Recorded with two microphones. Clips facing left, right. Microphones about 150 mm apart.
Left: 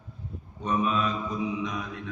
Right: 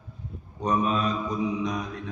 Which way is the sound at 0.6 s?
40° right (ahead or behind).